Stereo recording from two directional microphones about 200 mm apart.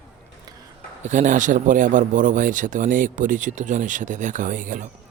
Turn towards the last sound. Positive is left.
turn(degrees=-40)  # may be behind; listen again after turning